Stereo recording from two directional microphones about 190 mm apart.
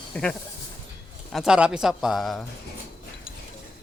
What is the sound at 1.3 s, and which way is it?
Speech, centre (ahead or behind).